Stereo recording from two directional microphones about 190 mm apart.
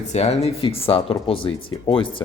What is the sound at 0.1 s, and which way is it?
Speech, 35° left (ahead or behind).